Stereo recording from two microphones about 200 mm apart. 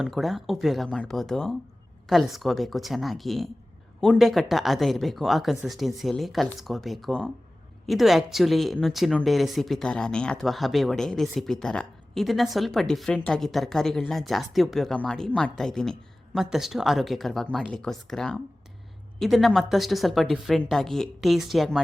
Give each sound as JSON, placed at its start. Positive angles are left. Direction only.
{"t": 0.0, "sound": "speech", "side_deg": 0}